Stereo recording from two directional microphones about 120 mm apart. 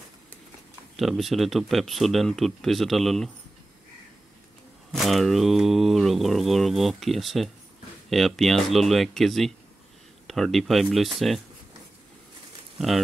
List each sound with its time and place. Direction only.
0.9 s speech: centre (ahead or behind)
4.9 s speech: centre (ahead or behind)
12.7 s speech: centre (ahead or behind)